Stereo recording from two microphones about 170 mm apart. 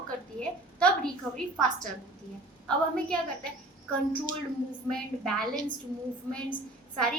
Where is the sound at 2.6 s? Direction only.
5° left (ahead or behind).